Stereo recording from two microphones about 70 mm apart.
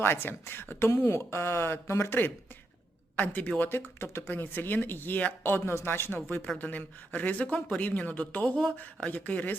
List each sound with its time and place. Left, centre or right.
0.0 s speech: left
3.2 s speech: left
3.6 s speech: left